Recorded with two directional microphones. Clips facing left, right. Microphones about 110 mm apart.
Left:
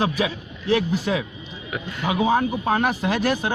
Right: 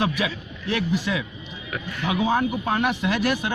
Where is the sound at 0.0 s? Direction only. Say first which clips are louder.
Left 2 dB; 35° left (ahead or behind).